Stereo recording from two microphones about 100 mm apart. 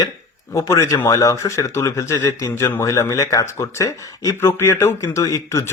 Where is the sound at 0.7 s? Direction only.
25° left (ahead or behind).